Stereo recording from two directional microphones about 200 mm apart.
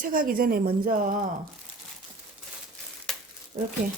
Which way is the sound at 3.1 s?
Centre (ahead or behind).